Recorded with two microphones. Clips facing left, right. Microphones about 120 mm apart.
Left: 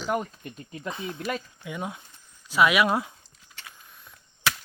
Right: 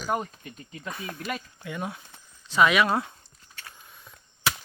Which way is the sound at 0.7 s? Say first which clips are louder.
Left 3 dB; 25° left (ahead or behind).